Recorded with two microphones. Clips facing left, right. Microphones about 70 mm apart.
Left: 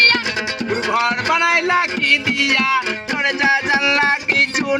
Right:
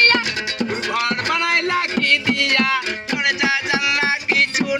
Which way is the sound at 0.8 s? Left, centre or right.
Centre.